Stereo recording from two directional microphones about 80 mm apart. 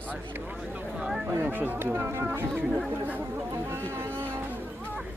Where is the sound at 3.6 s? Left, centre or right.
Right.